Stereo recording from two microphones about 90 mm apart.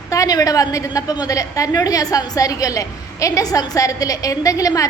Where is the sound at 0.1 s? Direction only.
40° left (ahead or behind).